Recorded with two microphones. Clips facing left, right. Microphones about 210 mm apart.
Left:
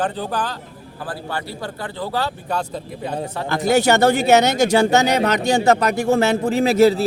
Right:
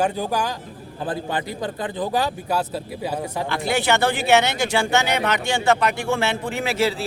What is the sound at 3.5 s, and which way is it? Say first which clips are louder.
Speech: left 6 dB; 40° left (ahead or behind).